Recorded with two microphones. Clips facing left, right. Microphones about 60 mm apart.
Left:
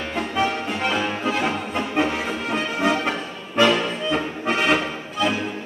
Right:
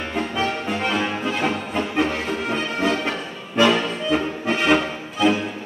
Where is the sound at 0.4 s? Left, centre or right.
Centre.